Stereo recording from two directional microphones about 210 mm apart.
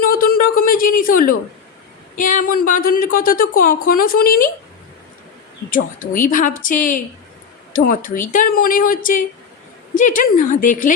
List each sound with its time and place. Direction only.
0.0 s a sound: 45° left (ahead or behind)
2.1 s speech: 40° left (ahead or behind)
5.7 s speech: 40° left (ahead or behind)